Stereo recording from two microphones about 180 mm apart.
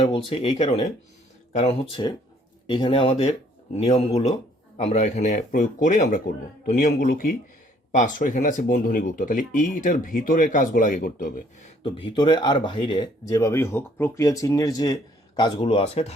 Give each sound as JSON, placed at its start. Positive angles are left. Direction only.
{"t": 0.0, "sound": "speech", "side_deg": 30}
{"t": 11.8, "sound": "speech", "side_deg": 30}